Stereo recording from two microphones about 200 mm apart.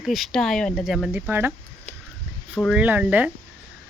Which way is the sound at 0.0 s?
Centre (ahead or behind).